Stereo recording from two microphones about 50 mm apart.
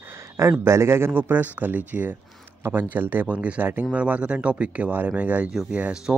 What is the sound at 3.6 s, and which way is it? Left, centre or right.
Speech, right.